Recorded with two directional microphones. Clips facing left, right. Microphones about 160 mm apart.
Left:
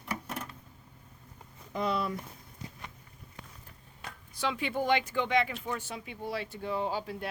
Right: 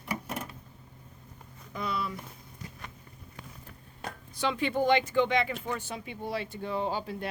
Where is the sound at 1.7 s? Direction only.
40° left (ahead or behind).